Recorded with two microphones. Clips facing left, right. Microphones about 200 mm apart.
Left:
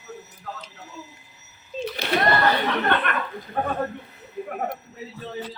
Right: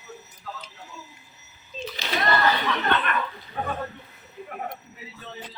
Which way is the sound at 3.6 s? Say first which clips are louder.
Left 4 dB; 55° left (ahead or behind).